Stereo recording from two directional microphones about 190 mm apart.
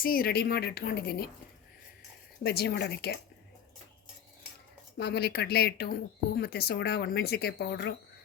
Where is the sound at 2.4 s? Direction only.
60° left (ahead or behind).